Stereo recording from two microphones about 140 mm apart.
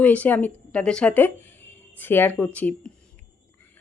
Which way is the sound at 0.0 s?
10° left (ahead or behind).